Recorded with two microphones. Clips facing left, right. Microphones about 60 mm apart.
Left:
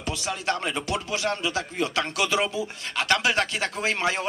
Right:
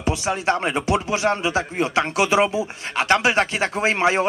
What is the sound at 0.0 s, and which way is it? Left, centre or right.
Speech, right.